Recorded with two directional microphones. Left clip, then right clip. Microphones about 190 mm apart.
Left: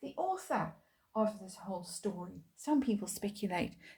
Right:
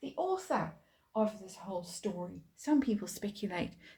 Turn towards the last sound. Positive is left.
turn(degrees=20)  # may be behind; listen again after turning